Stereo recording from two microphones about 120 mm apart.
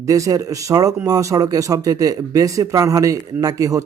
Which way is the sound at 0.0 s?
30° right (ahead or behind).